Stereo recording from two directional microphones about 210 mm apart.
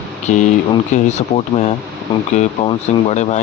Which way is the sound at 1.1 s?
35° left (ahead or behind).